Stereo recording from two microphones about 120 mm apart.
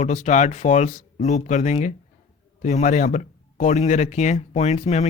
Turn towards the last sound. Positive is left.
turn(degrees=65)  # may be behind; listen again after turning